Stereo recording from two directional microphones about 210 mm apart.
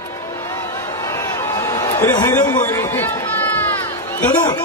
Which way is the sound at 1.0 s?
15° left (ahead or behind).